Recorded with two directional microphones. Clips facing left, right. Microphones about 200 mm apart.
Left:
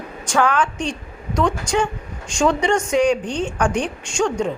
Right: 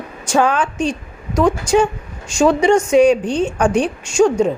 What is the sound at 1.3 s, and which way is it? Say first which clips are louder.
A woman's voice: right 6 dB; 5° right (ahead or behind).